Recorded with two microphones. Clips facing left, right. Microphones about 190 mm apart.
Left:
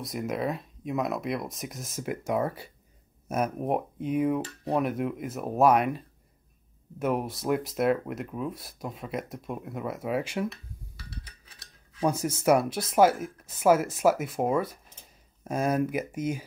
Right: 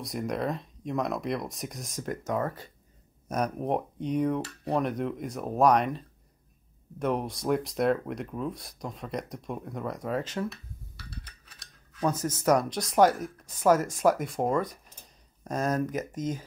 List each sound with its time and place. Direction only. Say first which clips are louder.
0.0 s speech: even; centre (ahead or behind)
12.0 s speech: left 1 dB; 10° left (ahead or behind)